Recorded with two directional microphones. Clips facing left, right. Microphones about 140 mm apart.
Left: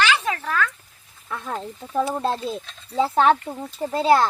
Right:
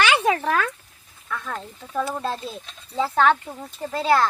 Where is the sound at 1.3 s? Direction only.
30° left (ahead or behind).